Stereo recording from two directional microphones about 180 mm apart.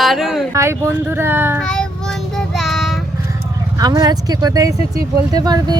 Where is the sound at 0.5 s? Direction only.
15° right (ahead or behind).